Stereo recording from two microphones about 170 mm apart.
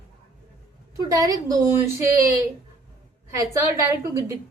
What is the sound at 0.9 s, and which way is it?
Speech, 20° right (ahead or behind).